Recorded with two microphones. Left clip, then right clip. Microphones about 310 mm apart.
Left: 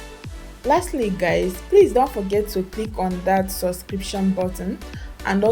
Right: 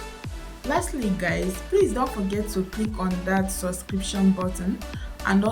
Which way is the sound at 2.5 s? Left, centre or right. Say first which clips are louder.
Left 3 dB; centre.